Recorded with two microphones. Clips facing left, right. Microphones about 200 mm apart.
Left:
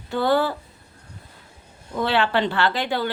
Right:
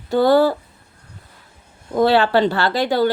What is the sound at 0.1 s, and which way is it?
Speech, 40° right (ahead or behind).